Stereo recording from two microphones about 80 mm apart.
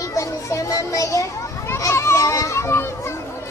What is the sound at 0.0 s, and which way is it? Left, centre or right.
Children playing, left.